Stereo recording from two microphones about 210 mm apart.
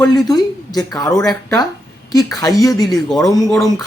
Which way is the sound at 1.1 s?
5° left (ahead or behind).